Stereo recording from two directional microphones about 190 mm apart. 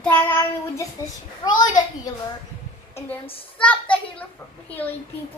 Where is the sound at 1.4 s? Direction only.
20° left (ahead or behind).